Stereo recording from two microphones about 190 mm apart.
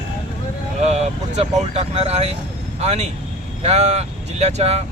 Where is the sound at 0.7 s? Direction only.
35° right (ahead or behind).